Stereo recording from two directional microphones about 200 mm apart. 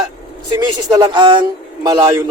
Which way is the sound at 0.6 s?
20° right (ahead or behind).